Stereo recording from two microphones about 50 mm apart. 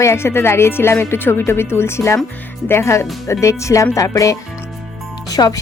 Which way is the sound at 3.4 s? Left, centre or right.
Left.